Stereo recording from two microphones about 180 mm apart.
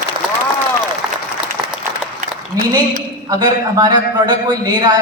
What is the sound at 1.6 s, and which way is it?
Applause, 5° right (ahead or behind).